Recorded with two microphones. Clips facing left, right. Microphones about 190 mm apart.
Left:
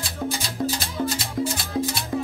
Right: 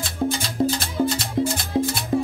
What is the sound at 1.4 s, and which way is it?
Music, 25° right (ahead or behind).